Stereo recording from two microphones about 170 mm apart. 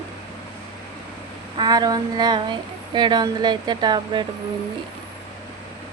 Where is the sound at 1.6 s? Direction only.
25° right (ahead or behind).